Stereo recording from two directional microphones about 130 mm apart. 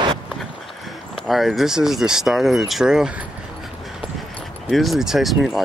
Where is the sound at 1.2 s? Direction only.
Centre (ahead or behind).